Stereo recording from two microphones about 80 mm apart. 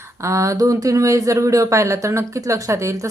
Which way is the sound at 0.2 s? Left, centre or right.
Right.